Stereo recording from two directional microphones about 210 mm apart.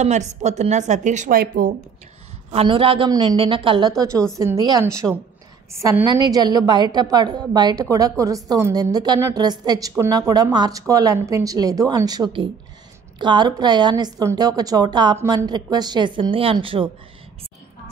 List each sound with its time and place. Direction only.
0.0 s a woman's voice: 35° right (ahead or behind)
2.5 s a woman's voice: 25° right (ahead or behind)